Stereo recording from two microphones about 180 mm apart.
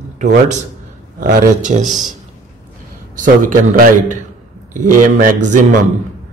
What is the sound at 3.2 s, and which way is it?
A man's voice, 50° right (ahead or behind).